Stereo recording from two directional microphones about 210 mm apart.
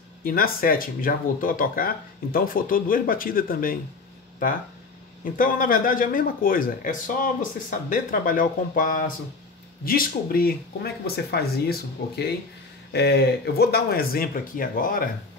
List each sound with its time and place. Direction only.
0.2 s speech: 45° left (ahead or behind)
5.2 s speech: 40° left (ahead or behind)